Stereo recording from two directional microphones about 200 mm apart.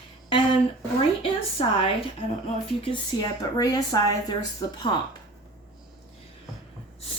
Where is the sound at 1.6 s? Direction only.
25° left (ahead or behind).